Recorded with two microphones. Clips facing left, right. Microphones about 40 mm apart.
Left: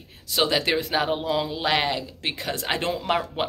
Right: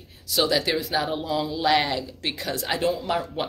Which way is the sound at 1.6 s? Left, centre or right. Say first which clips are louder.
Right 4 dB; left.